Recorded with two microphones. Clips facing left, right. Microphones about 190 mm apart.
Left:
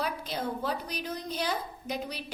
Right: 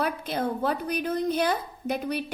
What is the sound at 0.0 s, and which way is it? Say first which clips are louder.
A woman's voice: right 5 dB; 55° right (ahead or behind).